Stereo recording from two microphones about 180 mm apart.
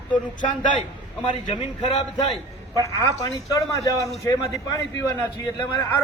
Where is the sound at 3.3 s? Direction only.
20° left (ahead or behind).